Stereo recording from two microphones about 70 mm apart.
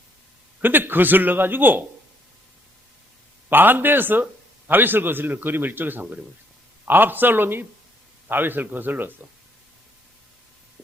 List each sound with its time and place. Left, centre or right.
0.6 s a man's voice: right
3.5 s a man's voice: right